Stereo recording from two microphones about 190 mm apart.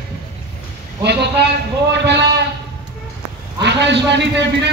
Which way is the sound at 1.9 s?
65° right (ahead or behind).